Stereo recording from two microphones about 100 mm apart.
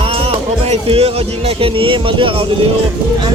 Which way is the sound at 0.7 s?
80° right.